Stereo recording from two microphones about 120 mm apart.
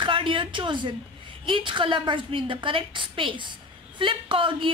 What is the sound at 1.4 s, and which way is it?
A woman's voice, 45° right (ahead or behind).